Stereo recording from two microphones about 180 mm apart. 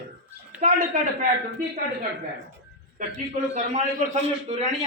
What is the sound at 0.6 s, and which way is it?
Speech, 50° right (ahead or behind).